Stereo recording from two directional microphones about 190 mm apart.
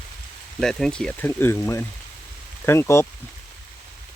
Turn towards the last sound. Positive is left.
turn(degrees=15)  # may be behind; listen again after turning